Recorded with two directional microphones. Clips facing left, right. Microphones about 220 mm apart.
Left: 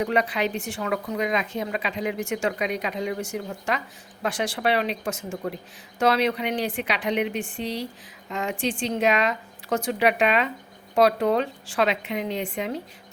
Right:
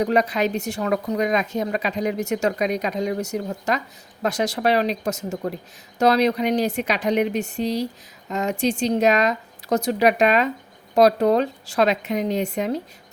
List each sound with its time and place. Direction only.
0.0 s speech: 40° right (ahead or behind)